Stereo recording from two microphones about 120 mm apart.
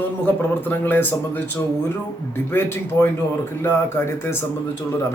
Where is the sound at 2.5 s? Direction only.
20° left (ahead or behind).